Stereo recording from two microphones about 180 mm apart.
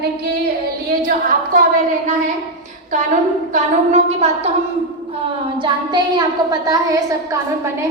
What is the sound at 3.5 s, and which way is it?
Speech, 40° right (ahead or behind).